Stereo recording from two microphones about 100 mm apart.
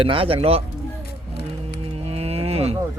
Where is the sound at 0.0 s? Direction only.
65° right (ahead or behind); by 0.6 s 85° right.